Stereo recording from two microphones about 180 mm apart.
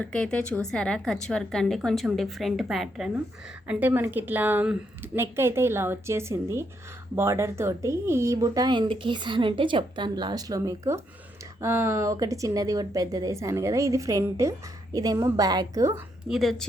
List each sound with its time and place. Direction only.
0.0 s a woman's voice: 5° left (ahead or behind); by 16.0 s 20° right (ahead or behind)
16.3 s a woman's voice: centre (ahead or behind)